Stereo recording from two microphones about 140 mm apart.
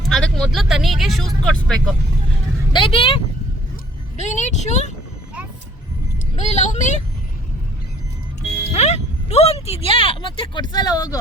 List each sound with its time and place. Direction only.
0.0 s vehicle: 5° left (ahead or behind)
2.7 s speech: 40° left (ahead or behind)
4.2 s speech: 60° left (ahead or behind)
6.3 s speech: 55° left (ahead or behind)
8.7 s speech: 50° left (ahead or behind); by 11.2 s 25° left (ahead or behind)